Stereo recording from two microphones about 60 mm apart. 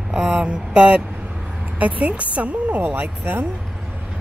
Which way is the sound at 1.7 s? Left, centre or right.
Right.